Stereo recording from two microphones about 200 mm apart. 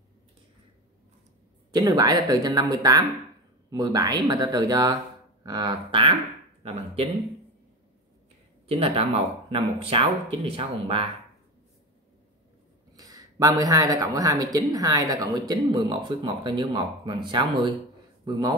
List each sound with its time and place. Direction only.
1.7 s speech: 20° right (ahead or behind)
8.6 s speech: 30° right (ahead or behind)
12.9 s a man's voice: 20° right (ahead or behind)